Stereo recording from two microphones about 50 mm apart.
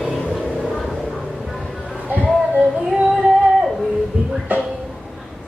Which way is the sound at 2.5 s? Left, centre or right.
Centre.